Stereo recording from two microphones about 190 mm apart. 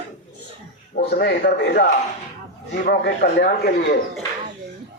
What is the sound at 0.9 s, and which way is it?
Speech, 50° left (ahead or behind).